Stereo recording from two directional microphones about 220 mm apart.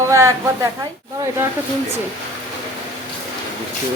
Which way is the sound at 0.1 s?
15° right (ahead or behind).